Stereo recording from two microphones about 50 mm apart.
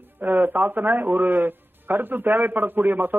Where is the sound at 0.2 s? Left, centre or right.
Right.